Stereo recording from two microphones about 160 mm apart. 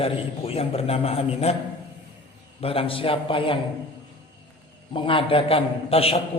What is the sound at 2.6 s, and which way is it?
Speech, 35° left (ahead or behind).